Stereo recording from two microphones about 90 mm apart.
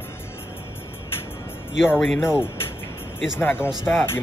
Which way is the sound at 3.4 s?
25° left (ahead or behind).